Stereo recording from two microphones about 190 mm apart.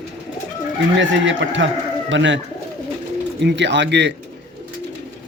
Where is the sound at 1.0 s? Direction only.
75° right (ahead or behind).